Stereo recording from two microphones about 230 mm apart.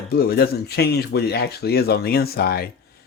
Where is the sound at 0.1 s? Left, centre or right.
Left.